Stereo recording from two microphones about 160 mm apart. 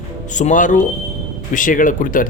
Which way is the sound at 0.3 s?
50° left (ahead or behind).